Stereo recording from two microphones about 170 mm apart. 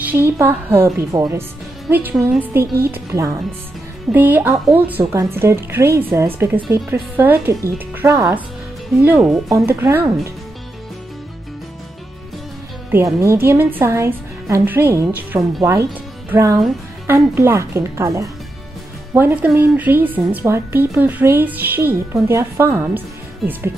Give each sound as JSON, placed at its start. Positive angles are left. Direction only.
{"t": 0.0, "sound": "a woman's voice", "side_deg": -10}
{"t": 9.0, "sound": "a woman's voice", "side_deg": -5}
{"t": 12.9, "sound": "a woman's voice", "side_deg": -15}